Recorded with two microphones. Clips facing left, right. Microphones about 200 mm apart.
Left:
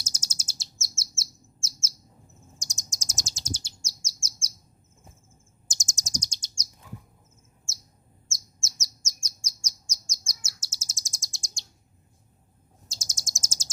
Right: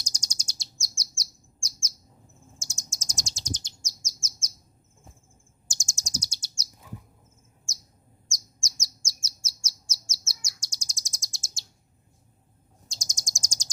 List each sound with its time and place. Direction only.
0.0 s chirp: 5° left (ahead or behind)
2.6 s chirp: 15° left (ahead or behind)
3.2 s bird: centre (ahead or behind)
5.7 s bird: 20° left (ahead or behind)
6.1 s bird: 10° right (ahead or behind)
8.3 s bird: 15° right (ahead or behind)
10.4 s chirp: 5° left (ahead or behind)
12.9 s bird: 5° left (ahead or behind)